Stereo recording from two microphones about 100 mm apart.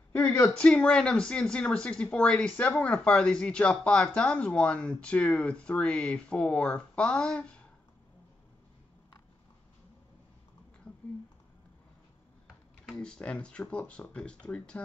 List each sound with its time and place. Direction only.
0.1 s a sound: 15° left (ahead or behind)
0.6 s speech: 10° left (ahead or behind)
12.8 s speech: 5° left (ahead or behind)